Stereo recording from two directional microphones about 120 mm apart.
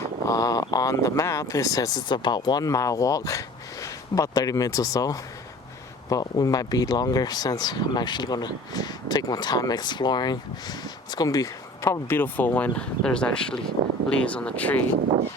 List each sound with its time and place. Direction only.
0.3 s speech: 30° left (ahead or behind); by 14.8 s 10° left (ahead or behind)